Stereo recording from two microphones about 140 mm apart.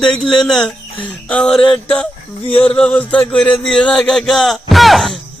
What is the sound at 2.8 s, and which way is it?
Speech, 10° left (ahead or behind).